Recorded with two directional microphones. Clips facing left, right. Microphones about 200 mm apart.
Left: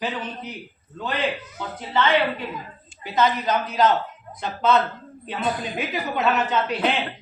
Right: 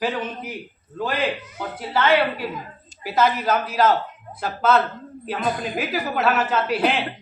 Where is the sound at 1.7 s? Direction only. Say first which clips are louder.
Right 2 dB; 5° right (ahead or behind).